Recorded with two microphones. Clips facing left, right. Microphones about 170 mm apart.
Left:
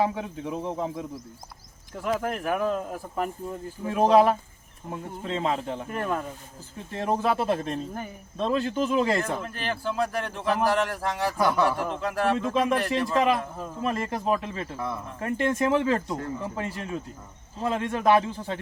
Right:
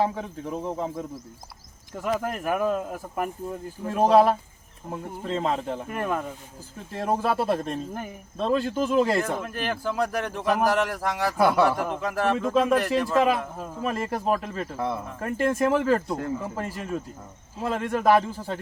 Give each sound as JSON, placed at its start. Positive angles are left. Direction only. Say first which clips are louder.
{"t": 0.0, "sound": "a man's voice", "louder": "even", "side_deg": 5}